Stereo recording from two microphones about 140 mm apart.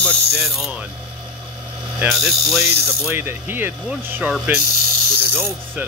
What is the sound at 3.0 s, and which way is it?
Speech, 15° right (ahead or behind).